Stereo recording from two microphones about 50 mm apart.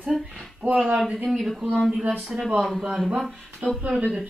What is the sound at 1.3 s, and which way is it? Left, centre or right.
Speech, centre.